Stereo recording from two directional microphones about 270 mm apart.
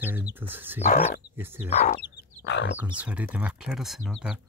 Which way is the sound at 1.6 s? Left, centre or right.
Left.